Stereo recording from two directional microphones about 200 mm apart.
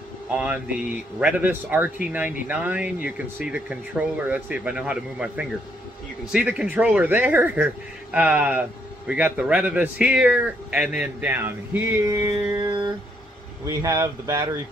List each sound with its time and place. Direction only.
0.4 s speech: 5° right (ahead or behind)
12.5 s a sound: 20° right (ahead or behind)
13.7 s speech: 15° right (ahead or behind)